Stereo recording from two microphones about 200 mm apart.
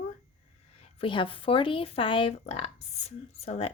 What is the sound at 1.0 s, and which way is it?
Speech, 25° left (ahead or behind).